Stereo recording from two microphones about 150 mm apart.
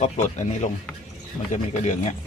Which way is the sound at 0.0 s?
50° left (ahead or behind).